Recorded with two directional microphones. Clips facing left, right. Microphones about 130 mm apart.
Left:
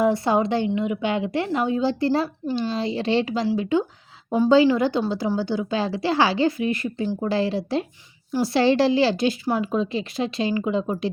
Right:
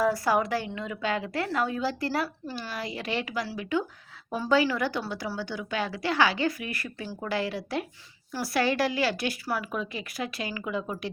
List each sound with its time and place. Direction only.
0.0 s a woman's voice: 25° left (ahead or behind)